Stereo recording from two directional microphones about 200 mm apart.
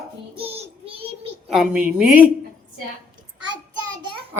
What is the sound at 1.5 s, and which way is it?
Speech, 5° right (ahead or behind).